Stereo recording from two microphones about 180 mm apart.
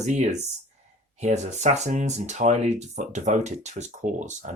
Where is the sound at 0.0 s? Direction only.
40° right (ahead or behind).